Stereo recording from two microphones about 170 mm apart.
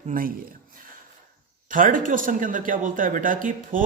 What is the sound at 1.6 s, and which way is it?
A man's voice, 50° right (ahead or behind).